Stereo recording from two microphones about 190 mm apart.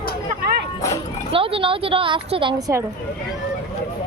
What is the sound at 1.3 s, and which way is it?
A woman's voice, 30° right (ahead or behind).